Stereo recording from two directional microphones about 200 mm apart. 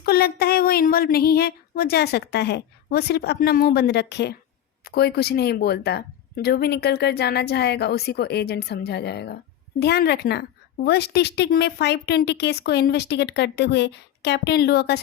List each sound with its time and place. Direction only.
0.0 s a woman's voice: 50° left (ahead or behind)